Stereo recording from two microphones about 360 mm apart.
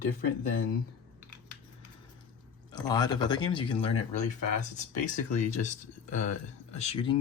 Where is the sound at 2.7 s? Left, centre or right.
Centre.